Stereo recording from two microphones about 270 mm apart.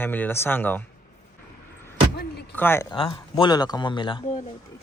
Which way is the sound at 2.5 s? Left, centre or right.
Centre.